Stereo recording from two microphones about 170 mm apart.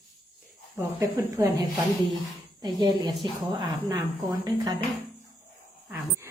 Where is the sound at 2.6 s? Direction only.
25° right (ahead or behind).